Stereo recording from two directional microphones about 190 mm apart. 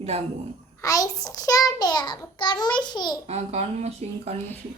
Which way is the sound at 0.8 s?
20° left (ahead or behind).